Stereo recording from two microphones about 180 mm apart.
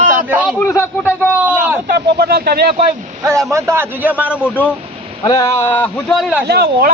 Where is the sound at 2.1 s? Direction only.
60° right (ahead or behind).